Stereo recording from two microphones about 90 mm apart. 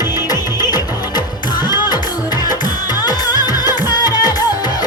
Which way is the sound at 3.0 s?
45° left (ahead or behind).